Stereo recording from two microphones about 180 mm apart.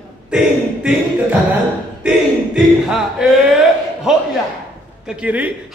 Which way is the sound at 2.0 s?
5° right (ahead or behind).